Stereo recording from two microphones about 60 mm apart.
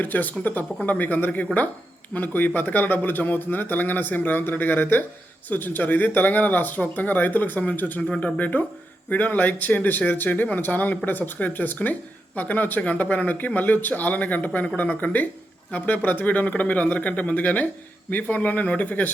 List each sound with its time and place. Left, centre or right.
0.0 s a man's voice: left
8.0 s speech: centre